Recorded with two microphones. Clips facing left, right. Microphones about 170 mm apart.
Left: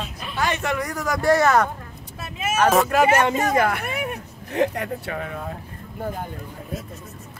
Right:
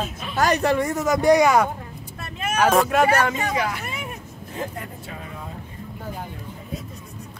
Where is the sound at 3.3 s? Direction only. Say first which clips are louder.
Left 5 dB; 45° left (ahead or behind); by 5.3 s 75° left (ahead or behind).